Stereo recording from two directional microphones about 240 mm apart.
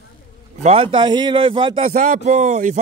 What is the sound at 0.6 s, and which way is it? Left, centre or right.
A man's voice, right.